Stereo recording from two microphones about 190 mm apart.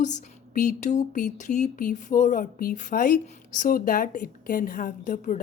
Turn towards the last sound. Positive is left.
turn(degrees=45)  # may be behind; listen again after turning